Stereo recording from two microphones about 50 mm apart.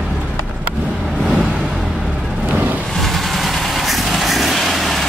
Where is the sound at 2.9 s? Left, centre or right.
Centre.